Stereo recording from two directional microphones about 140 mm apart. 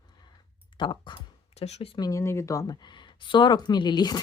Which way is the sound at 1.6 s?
50° left (ahead or behind).